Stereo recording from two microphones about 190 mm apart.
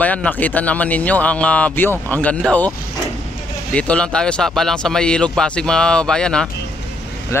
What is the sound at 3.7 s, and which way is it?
Speech, 5° left (ahead or behind).